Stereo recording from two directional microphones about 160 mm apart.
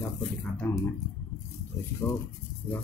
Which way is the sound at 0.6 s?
15° left (ahead or behind).